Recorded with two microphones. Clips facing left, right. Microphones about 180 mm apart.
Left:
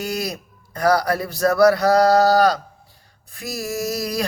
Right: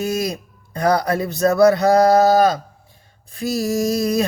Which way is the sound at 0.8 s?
20° right (ahead or behind).